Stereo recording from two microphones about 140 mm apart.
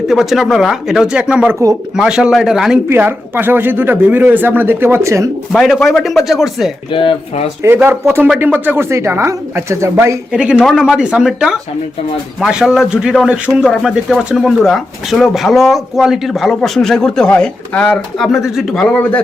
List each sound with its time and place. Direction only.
0.1 s a man's voice: centre (ahead or behind)
2.9 s speech: 15° right (ahead or behind)
5.5 s a man's voice: centre (ahead or behind)
6.9 s speech: 40° left (ahead or behind)
7.8 s speech: 15° right (ahead or behind)
10.3 s a man's voice: 5° right (ahead or behind); by 19.2 s 10° left (ahead or behind)